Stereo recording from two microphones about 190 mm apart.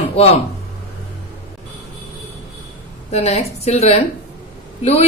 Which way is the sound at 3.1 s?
35° left (ahead or behind).